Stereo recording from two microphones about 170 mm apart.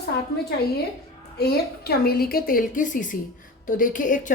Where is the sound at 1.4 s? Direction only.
65° left (ahead or behind); by 4.2 s 50° left (ahead or behind).